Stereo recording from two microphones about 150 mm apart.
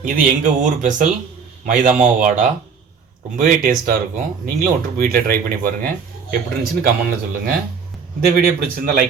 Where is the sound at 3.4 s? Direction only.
65° right (ahead or behind).